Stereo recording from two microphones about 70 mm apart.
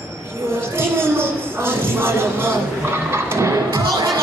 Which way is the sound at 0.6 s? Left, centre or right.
Right.